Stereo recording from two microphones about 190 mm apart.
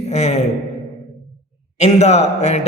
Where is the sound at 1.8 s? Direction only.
35° left (ahead or behind).